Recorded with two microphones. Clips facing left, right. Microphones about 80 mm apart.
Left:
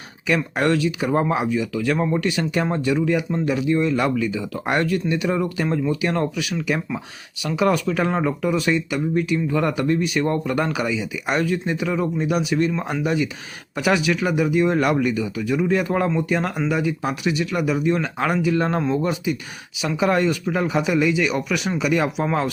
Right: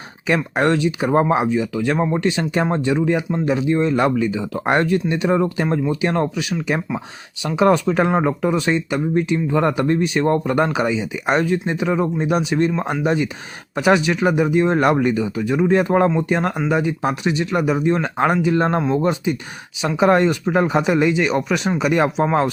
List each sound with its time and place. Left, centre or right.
0.3 s speech: right